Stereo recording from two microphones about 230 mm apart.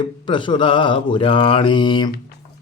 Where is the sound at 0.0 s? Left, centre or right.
Left.